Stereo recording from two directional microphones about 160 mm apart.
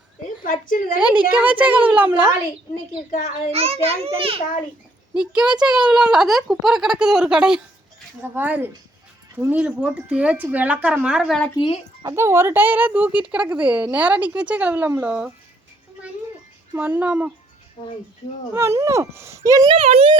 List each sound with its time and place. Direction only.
0.9 s speech: 10° right (ahead or behind)
3.1 s a child's voice: 50° left (ahead or behind)
3.5 s a child's voice: 40° right (ahead or behind)
5.1 s speech: 5° right (ahead or behind)
11.5 s speech: 30° left (ahead or behind)
12.0 s speech: 15° right (ahead or behind)
16.7 s speech: 10° right (ahead or behind)
17.8 s speech: 30° left (ahead or behind)
18.5 s speech: 15° right (ahead or behind)
19.7 s a child's voice: 40° right (ahead or behind)